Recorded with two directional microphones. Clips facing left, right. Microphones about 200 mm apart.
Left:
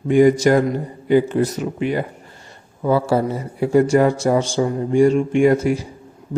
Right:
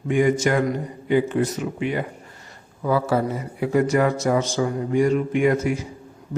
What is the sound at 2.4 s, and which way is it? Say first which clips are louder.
Speech: left 4 dB; 30° left (ahead or behind).